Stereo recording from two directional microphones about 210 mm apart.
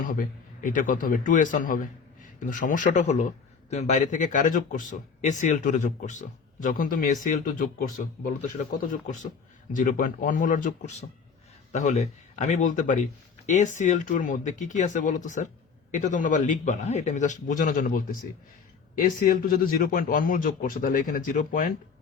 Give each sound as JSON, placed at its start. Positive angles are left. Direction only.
{"t": 0.0, "sound": "a man's voice", "side_deg": 40}